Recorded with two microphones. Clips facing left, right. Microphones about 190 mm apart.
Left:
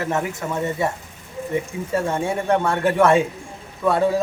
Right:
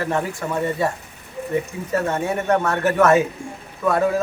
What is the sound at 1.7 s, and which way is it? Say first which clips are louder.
Speech: left 2 dB; 20° left (ahead or behind).